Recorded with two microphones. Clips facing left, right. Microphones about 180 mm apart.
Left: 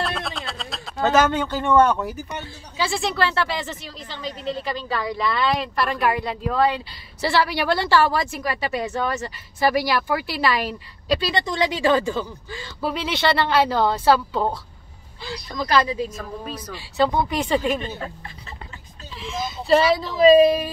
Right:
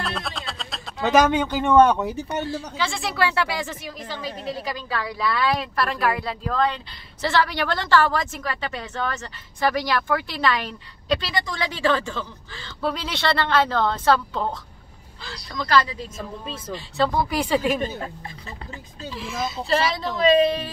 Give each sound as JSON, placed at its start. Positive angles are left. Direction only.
{"t": 0.0, "sound": "a sound", "side_deg": 0}
{"t": 1.0, "sound": "speech", "side_deg": -15}
{"t": 2.9, "sound": "a woman's voice", "side_deg": 0}
{"t": 11.2, "sound": "a woman's voice", "side_deg": 20}
{"t": 16.4, "sound": "speech", "side_deg": -25}
{"t": 16.7, "sound": "speech", "side_deg": 5}
{"t": 19.1, "sound": "speech", "side_deg": 0}